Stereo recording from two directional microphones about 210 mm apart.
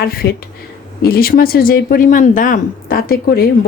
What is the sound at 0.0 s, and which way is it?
A woman's voice, 45° left (ahead or behind).